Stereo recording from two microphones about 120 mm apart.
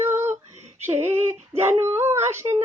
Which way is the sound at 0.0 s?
20° right (ahead or behind).